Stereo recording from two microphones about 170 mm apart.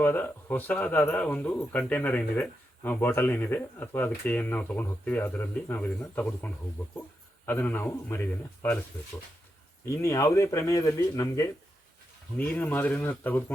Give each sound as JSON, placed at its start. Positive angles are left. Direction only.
{"t": 0.0, "sound": "speech", "side_deg": 10}
{"t": 9.9, "sound": "speech", "side_deg": 15}